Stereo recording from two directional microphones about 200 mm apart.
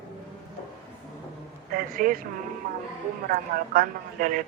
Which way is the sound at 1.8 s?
45° right (ahead or behind).